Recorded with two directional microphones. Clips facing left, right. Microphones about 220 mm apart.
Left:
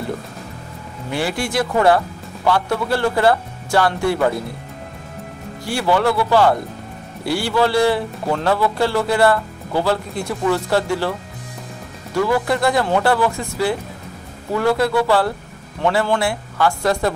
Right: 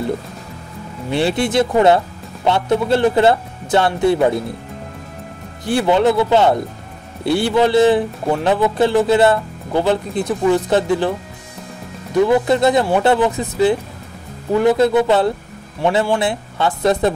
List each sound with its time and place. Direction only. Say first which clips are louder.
1.1 s a man's voice: right 5 dB; 25° right (ahead or behind)
5.7 s a man's voice: right 4 dB; 20° right (ahead or behind)